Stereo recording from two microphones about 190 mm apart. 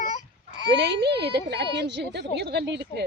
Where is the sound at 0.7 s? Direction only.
65° right (ahead or behind).